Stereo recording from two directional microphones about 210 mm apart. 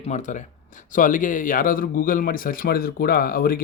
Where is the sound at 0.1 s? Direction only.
35° left (ahead or behind).